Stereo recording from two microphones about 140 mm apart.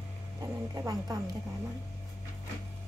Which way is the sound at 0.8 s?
25° right (ahead or behind).